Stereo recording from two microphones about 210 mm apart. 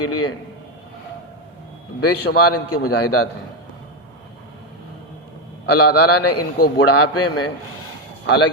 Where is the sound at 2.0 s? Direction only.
90° left.